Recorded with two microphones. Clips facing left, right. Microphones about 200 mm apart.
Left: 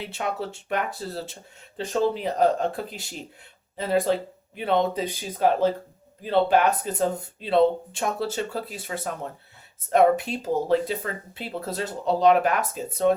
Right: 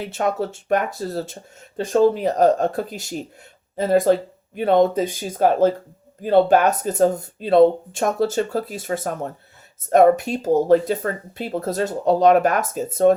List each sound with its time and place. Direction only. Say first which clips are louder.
0.0 s speech: right 7 dB; 45° right (ahead or behind)